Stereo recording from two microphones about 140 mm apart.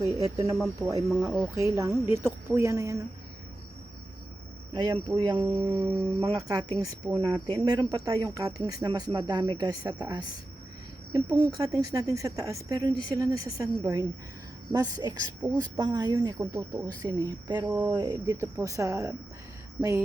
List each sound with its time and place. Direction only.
0.0 s speech: 25° right (ahead or behind)
4.7 s a woman's voice: 35° right (ahead or behind)
5.6 s cricket: 15° right (ahead or behind)
6.5 s a woman's voice: 30° right (ahead or behind)